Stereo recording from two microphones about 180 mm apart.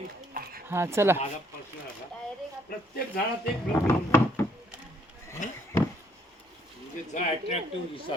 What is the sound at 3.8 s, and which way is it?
Wood, 15° left (ahead or behind).